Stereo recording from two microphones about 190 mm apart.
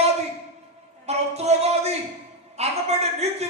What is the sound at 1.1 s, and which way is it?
Speech, 35° right (ahead or behind).